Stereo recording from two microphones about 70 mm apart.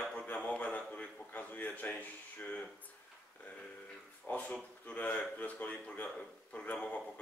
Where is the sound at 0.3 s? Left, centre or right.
Centre.